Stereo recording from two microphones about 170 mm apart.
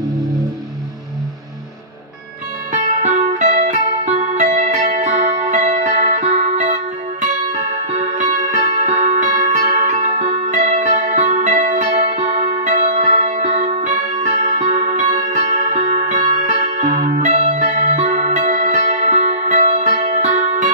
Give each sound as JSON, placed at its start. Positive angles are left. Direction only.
{"t": 2.7, "sound": "music", "side_deg": -45}